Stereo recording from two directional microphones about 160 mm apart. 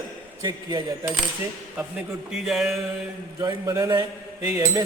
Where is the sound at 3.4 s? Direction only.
20° right (ahead or behind).